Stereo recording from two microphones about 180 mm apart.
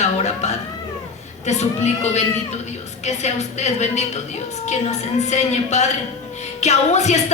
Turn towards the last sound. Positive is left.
turn(degrees=40)  # may be behind; listen again after turning